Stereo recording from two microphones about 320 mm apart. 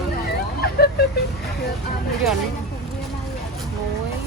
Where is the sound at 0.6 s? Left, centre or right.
Left.